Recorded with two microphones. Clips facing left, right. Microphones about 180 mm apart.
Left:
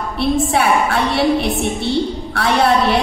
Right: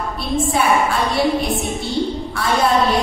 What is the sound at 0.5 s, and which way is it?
Speech, 65° left (ahead or behind).